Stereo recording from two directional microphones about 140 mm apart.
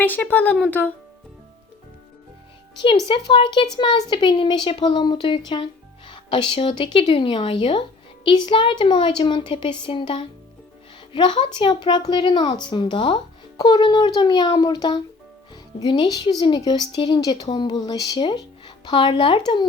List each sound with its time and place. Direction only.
0.0 s speech: 10° left (ahead or behind)
3.1 s speech: 35° left (ahead or behind)